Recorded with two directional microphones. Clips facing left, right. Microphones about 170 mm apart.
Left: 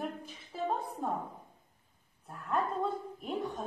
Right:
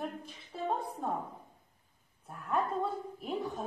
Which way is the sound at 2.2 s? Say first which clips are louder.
Even; centre (ahead or behind).